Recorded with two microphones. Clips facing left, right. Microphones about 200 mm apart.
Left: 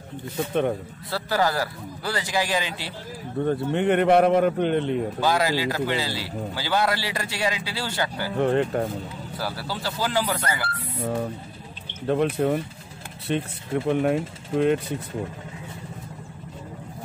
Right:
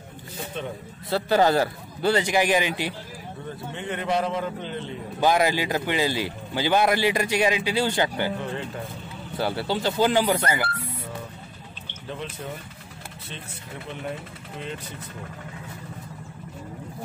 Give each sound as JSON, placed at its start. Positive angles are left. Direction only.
{"t": 1.1, "sound": "a man's voice", "side_deg": -25}
{"t": 3.4, "sound": "a man's voice", "side_deg": 60}
{"t": 5.2, "sound": "a man's voice", "side_deg": -20}
{"t": 8.4, "sound": "a man's voice", "side_deg": 60}
{"t": 9.4, "sound": "a man's voice", "side_deg": -25}
{"t": 12.1, "sound": "a man's voice", "side_deg": 55}
{"t": 13.8, "sound": "speech", "side_deg": 50}